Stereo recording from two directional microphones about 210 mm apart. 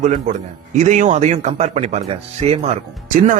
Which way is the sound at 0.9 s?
35° right (ahead or behind).